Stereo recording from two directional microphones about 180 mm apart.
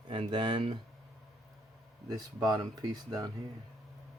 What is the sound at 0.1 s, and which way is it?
Speech, 25° right (ahead or behind).